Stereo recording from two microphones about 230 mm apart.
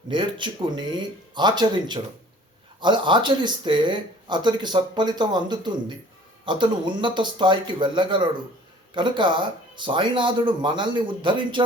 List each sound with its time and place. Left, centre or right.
0.1 s speech: right